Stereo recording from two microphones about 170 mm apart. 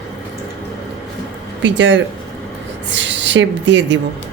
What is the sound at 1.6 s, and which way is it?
A woman's voice, 90° right.